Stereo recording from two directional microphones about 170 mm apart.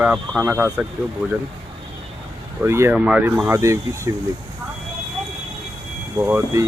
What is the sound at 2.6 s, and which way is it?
Speech, 15° right (ahead or behind).